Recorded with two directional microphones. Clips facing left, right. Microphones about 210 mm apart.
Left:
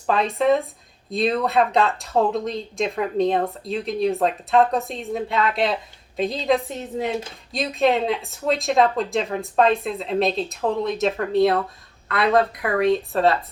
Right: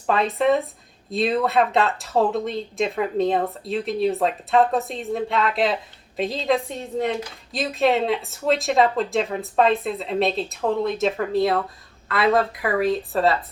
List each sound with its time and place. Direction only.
0.1 s speech: centre (ahead or behind)